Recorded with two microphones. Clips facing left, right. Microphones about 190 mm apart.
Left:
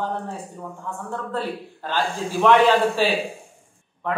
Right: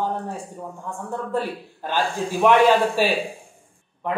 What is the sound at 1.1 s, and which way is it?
A man's voice, 15° right (ahead or behind).